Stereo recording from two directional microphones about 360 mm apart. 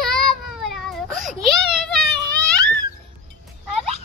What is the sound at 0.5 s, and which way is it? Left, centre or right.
Baby cry, centre.